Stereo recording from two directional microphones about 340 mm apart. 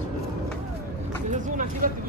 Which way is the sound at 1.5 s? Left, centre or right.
Right.